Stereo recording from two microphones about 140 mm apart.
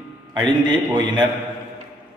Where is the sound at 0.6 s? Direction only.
30° right (ahead or behind).